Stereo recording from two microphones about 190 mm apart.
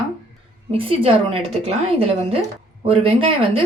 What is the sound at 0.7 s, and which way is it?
A woman's voice, 30° right (ahead or behind).